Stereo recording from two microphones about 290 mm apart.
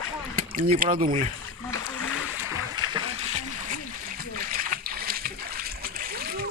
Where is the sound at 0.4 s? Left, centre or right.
Right.